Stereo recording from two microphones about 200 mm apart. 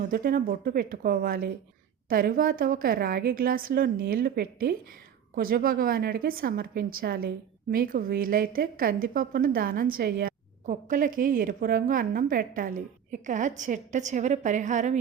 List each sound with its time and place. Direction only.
0.0 s a woman's voice: 45° right (ahead or behind)